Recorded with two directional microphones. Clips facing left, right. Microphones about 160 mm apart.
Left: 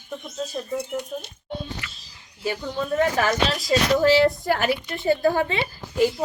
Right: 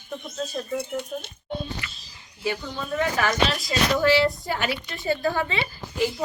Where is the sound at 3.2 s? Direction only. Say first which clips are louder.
Left 1 dB; 40° left (ahead or behind).